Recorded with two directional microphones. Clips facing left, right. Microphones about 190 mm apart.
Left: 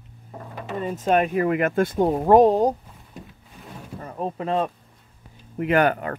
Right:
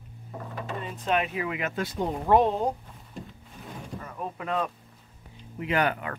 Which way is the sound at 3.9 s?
35° left (ahead or behind).